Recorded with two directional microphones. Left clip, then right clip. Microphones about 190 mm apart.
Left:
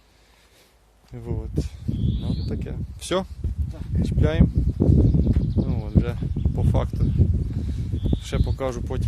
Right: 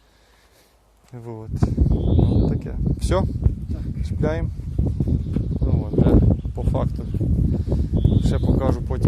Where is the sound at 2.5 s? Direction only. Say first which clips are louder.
Right 6 dB; 15° left (ahead or behind).